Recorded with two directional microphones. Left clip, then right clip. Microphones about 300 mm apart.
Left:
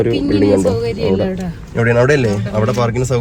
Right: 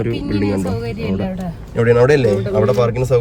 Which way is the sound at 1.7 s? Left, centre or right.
Centre.